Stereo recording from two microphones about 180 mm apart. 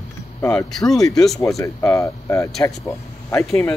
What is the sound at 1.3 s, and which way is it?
Speech, 15° left (ahead or behind).